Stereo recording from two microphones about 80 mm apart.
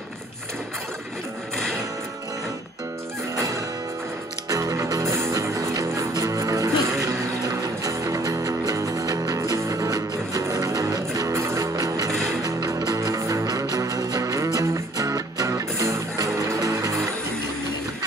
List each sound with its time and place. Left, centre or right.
3.3 s music: right
5.0 s music: right
7.4 s music: right
11.6 s music: right